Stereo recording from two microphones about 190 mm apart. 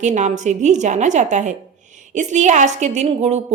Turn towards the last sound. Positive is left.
turn(degrees=-35)  # may be behind; listen again after turning